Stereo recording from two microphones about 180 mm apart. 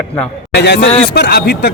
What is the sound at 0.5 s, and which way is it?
A man's voice, 70° left (ahead or behind).